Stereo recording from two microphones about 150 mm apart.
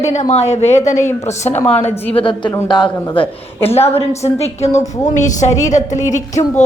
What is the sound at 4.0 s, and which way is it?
A woman's voice, 45° left (ahead or behind).